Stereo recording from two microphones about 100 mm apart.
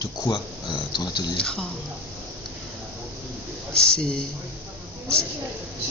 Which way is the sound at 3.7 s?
5° left (ahead or behind).